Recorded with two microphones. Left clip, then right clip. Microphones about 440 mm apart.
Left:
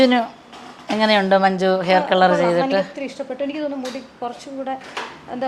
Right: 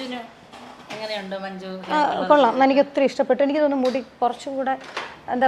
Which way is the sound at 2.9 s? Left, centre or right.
Right.